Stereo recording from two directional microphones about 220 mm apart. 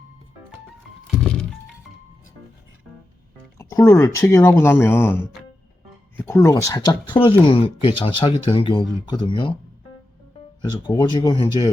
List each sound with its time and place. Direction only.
1.0 s music: 5° left (ahead or behind)
3.6 s speech: 15° left (ahead or behind)
10.6 s speech: 20° left (ahead or behind)